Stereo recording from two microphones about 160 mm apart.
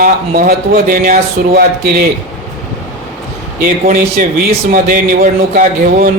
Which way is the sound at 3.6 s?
60° right (ahead or behind).